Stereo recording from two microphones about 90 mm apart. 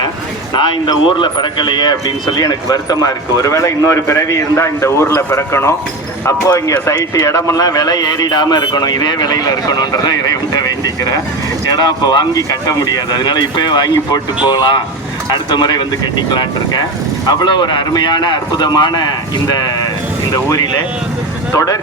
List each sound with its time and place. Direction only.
0.5 s a man's voice: 60° left (ahead or behind); by 21.8 s 35° left (ahead or behind)